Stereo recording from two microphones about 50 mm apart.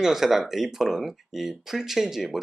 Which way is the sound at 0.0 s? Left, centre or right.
Centre.